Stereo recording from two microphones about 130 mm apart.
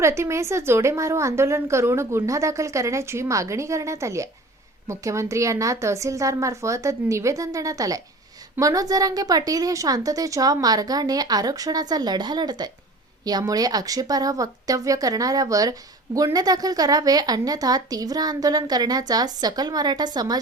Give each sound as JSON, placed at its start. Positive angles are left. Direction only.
{"t": 0.0, "sound": "a woman's voice", "side_deg": -20}